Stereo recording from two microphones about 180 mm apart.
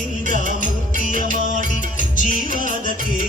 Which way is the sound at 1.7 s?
45° left (ahead or behind).